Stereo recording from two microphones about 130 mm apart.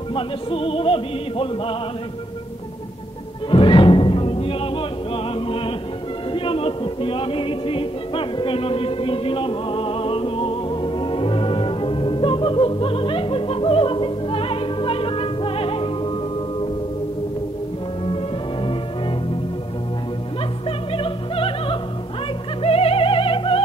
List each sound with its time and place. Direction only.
0.1 s music: 45° left (ahead or behind)
3.4 s music: 40° left (ahead or behind)
6.3 s singing: 45° left (ahead or behind)
20.6 s opera: 45° left (ahead or behind)
22.6 s music: 50° left (ahead or behind)